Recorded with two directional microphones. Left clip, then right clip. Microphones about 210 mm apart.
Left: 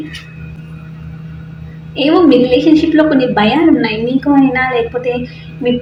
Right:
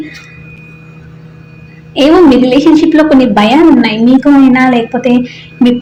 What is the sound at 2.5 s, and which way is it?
A woman's voice, 40° right (ahead or behind).